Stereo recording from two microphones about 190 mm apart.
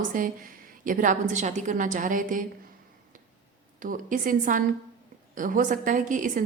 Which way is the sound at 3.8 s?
45° right (ahead or behind).